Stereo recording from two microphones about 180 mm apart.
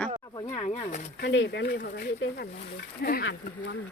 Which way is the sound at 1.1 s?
80° left.